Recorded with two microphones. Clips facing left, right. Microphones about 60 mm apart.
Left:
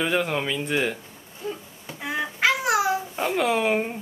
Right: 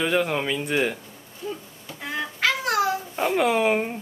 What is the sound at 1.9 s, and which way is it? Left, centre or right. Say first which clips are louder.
Babbling: left 2 dB; centre.